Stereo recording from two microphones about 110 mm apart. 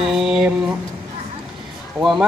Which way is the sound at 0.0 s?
5° right (ahead or behind).